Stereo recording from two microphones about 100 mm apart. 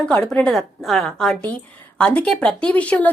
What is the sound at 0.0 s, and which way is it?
A woman's voice, 10° left (ahead or behind).